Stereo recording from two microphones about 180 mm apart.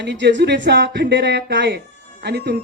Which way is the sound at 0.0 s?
75° right (ahead or behind).